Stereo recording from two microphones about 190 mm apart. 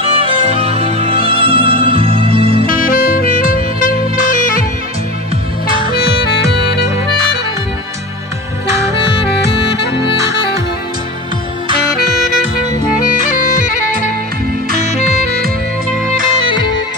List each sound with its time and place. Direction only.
0.0 s music: 30° right (ahead or behind)
2.6 s saxophone: 45° left (ahead or behind)
5.9 s music: 60° left (ahead or behind)
13.3 s bagpipes: 45° left (ahead or behind)
14.9 s music: 40° left (ahead or behind)
15.2 s music: 55° right (ahead or behind)